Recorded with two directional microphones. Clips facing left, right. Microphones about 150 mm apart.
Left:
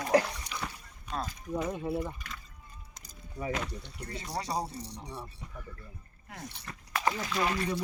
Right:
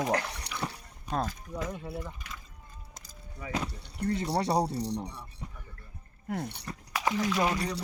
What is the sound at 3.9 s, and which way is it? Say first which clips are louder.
Speech: right 13 dB; 60° right (ahead or behind).